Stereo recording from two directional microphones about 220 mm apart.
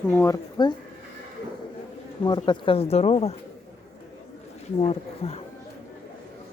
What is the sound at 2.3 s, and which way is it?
Speech, 20° left (ahead or behind).